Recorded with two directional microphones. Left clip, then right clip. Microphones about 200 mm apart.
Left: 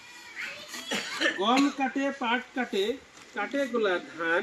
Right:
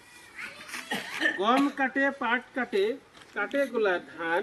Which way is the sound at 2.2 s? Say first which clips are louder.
Even; 30° left (ahead or behind).